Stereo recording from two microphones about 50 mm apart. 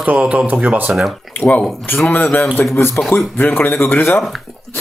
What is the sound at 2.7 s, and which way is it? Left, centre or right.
Speech, left.